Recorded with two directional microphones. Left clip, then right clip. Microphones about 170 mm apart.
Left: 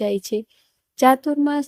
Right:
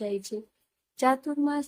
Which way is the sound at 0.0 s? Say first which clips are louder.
Left 9 dB; 40° left (ahead or behind).